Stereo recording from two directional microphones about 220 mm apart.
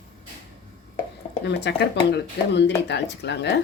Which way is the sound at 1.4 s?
50° left (ahead or behind).